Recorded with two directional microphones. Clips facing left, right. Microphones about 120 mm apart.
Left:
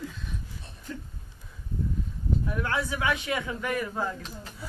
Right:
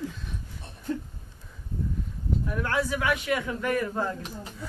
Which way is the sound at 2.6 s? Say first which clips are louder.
Right 3 dB; 25° left (ahead or behind).